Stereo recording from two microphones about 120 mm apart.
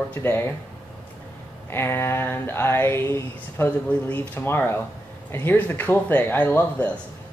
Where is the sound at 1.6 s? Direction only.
20° left (ahead or behind).